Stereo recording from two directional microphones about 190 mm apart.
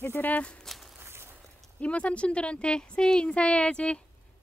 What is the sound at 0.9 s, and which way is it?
Walk, 10° right (ahead or behind).